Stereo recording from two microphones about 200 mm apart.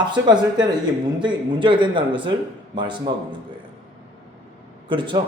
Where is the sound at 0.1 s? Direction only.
20° right (ahead or behind).